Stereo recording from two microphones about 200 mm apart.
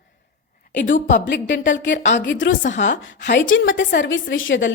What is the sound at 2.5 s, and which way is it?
Speech, 40° left (ahead or behind).